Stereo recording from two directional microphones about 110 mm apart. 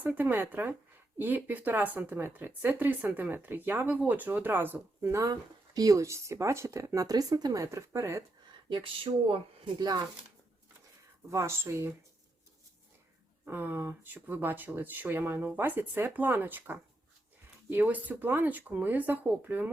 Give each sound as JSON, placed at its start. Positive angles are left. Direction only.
{"t": 0.0, "sound": "speech", "side_deg": -15}
{"t": 5.2, "sound": "speech", "side_deg": -35}
{"t": 9.1, "sound": "speech", "side_deg": -55}
{"t": 9.7, "sound": "speech", "side_deg": -40}
{"t": 11.3, "sound": "speech", "side_deg": -25}
{"t": 13.4, "sound": "speech", "side_deg": -20}